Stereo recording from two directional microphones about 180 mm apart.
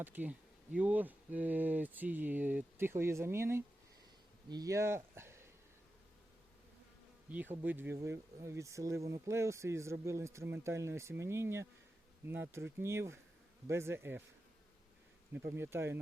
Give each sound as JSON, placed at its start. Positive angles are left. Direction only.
{"t": 0.0, "sound": "speech", "side_deg": -10}
{"t": 7.3, "sound": "speech", "side_deg": -10}
{"t": 15.3, "sound": "speech", "side_deg": -15}